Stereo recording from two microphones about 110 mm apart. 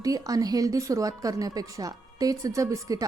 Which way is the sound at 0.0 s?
35° right (ahead or behind).